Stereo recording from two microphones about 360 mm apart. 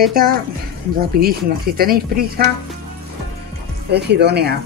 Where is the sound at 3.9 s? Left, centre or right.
Right.